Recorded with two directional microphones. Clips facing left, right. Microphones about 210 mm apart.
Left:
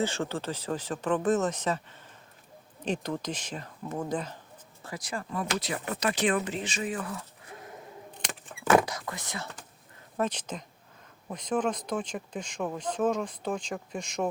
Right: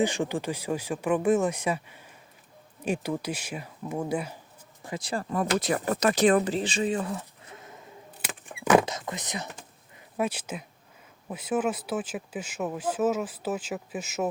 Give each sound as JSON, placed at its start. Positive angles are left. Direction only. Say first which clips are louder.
{"t": 0.0, "sound": "speech", "louder": "right 4 dB", "side_deg": -15}
{"t": 4.9, "sound": "speech", "louder": "right 5 dB", "side_deg": -30}
{"t": 5.3, "sound": "speech", "louder": "right 6 dB", "side_deg": -45}
{"t": 8.2, "sound": "keys jangling", "louder": "right 2 dB", "side_deg": -5}
{"t": 8.6, "sound": "a sound", "louder": "right 2 dB", "side_deg": -20}
{"t": 10.2, "sound": "speech", "louder": "right 1 dB", "side_deg": -10}